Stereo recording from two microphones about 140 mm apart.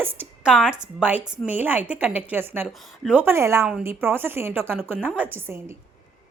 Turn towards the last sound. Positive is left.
turn(degrees=-15)  # may be behind; listen again after turning